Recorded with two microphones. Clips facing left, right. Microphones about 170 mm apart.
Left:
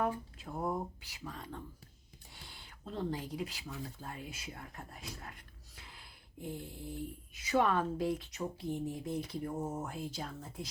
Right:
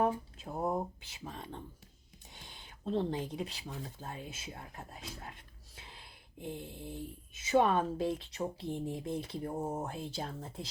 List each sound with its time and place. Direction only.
0.0 s speech: 25° right (ahead or behind)